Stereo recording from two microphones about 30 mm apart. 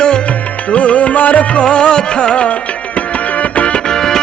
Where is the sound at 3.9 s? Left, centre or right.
Centre.